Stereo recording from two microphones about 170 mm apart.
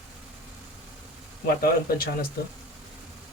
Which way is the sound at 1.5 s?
65° left (ahead or behind).